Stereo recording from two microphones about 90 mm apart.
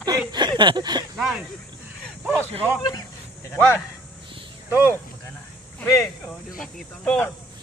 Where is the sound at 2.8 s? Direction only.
55° left (ahead or behind).